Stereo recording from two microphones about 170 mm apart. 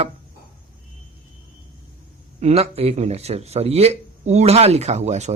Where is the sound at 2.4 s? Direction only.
35° right (ahead or behind).